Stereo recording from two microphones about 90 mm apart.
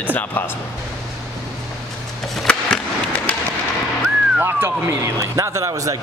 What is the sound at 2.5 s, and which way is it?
Skateboard, 10° left (ahead or behind).